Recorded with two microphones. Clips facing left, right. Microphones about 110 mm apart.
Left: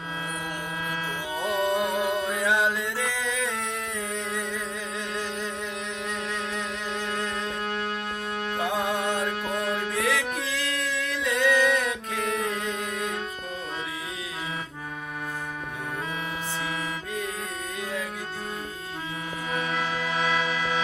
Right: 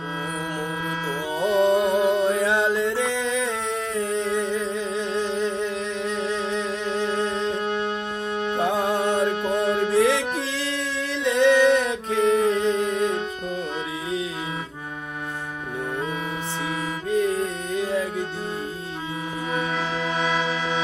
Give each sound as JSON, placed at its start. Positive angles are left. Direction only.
{"t": 1.4, "sound": "music", "side_deg": -30}
{"t": 20.5, "sound": "music", "side_deg": 0}